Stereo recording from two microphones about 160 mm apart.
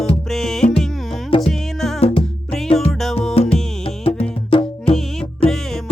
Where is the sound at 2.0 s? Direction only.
40° left (ahead or behind).